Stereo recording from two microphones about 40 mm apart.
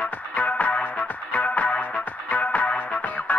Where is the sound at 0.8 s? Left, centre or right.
Left.